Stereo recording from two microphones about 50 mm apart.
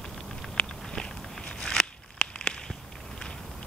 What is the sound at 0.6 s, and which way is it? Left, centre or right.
Walk, centre.